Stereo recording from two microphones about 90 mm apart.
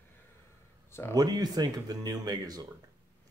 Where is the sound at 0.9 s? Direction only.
30° left (ahead or behind).